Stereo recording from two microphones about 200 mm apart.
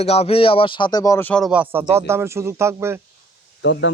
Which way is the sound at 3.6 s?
65° left (ahead or behind).